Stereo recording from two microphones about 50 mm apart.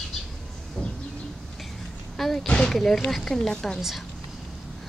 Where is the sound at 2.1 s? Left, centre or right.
Centre.